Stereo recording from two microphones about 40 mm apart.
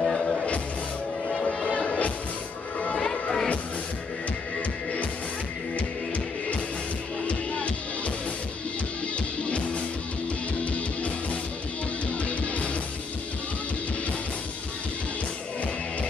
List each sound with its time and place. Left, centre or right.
0.0 s music: centre
3.0 s music: centre
5.8 s music: left
9.4 s music: left